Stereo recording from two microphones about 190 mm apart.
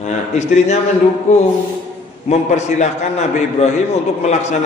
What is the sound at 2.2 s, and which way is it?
A man's voice, 35° left (ahead or behind).